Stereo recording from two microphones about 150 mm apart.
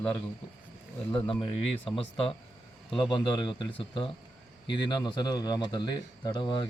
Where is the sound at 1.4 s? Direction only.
35° left (ahead or behind).